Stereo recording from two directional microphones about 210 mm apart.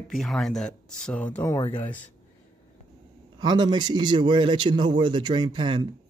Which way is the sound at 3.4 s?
20° right (ahead or behind).